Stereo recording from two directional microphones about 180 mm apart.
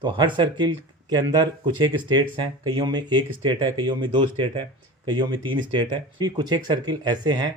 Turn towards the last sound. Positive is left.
turn(degrees=-20)  # may be behind; listen again after turning